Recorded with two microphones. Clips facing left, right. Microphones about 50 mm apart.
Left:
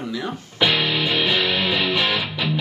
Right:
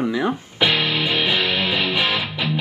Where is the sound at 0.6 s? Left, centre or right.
Centre.